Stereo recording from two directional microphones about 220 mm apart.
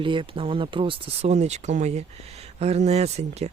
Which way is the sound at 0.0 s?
20° right (ahead or behind).